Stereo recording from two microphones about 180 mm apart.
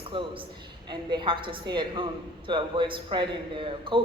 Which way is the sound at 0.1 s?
30° right (ahead or behind).